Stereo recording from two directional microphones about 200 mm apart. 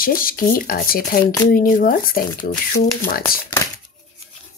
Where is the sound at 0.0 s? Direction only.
45° left (ahead or behind).